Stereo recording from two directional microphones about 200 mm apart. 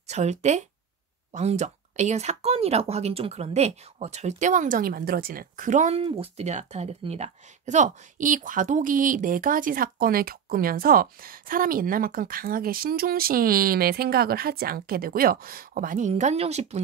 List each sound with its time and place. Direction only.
0.1 s speech: 35° right (ahead or behind)